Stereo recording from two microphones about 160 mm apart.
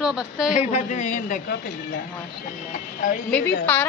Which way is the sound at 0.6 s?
45° left (ahead or behind).